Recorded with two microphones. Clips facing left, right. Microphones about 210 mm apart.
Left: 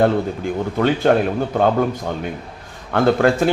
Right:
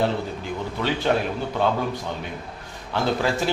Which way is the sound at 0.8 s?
50° left (ahead or behind).